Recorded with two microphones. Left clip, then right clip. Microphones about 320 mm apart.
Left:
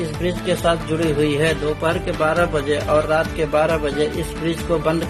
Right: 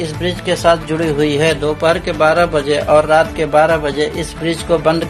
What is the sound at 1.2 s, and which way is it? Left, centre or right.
A man's voice, left.